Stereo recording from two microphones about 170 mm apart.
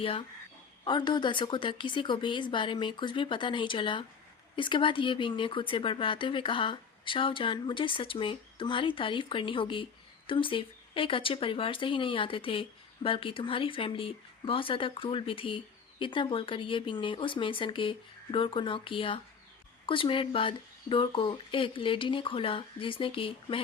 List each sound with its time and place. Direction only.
0.9 s speech: 25° left (ahead or behind)